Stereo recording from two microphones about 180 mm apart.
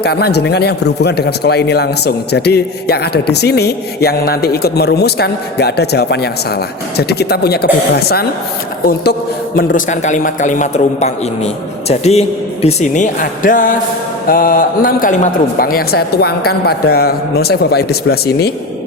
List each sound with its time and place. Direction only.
0.0 s a man's voice: 65° left (ahead or behind)
9.6 s a man's voice: 45° left (ahead or behind); by 18.5 s 60° left (ahead or behind)